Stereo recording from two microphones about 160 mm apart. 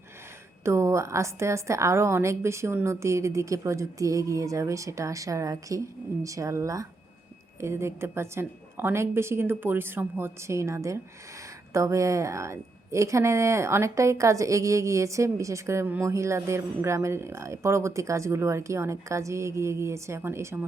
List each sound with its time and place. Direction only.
0.6 s a woman's voice: 15° right (ahead or behind)